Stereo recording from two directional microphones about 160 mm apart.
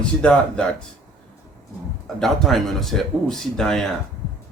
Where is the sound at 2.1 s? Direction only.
Centre (ahead or behind).